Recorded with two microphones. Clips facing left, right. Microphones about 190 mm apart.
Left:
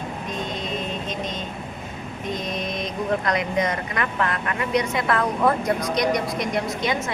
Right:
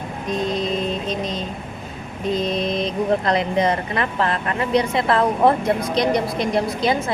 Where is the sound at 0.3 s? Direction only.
35° right (ahead or behind).